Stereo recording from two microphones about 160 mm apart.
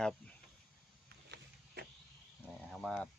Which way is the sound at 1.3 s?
90° right.